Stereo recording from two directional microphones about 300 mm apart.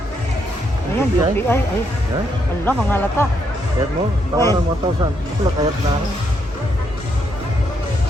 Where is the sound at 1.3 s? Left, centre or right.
Centre.